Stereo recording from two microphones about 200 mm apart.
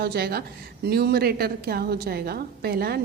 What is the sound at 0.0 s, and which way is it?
A woman's voice, 50° right (ahead or behind).